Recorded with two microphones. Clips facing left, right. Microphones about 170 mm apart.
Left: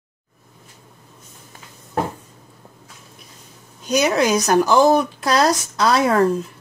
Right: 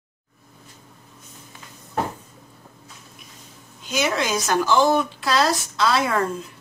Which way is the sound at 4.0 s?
40° left (ahead or behind).